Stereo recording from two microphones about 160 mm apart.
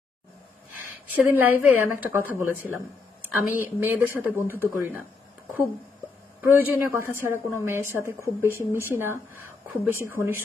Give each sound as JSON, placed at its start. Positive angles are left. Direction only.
{"t": 1.0, "sound": "speech", "side_deg": -10}
{"t": 6.4, "sound": "speech", "side_deg": -10}